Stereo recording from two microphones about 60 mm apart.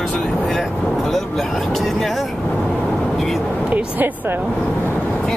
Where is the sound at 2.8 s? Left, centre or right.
Centre.